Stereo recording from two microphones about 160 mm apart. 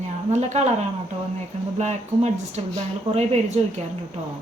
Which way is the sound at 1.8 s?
45° right (ahead or behind).